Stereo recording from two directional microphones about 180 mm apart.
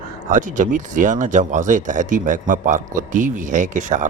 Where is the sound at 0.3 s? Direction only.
45° right (ahead or behind).